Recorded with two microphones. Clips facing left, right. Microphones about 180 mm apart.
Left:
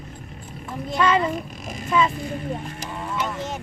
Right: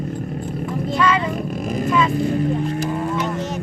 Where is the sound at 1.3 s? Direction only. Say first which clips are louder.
Right 8 dB; 45° right (ahead or behind).